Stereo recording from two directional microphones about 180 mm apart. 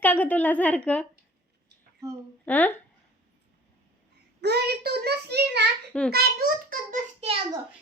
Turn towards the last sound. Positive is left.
turn(degrees=-35)  # may be behind; listen again after turning